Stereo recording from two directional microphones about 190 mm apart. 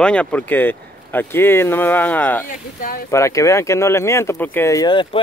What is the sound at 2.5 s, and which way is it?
Speech, 45° left (ahead or behind).